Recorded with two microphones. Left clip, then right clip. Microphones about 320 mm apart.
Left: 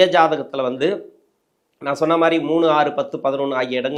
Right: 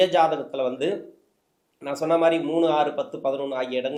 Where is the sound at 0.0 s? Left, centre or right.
Left.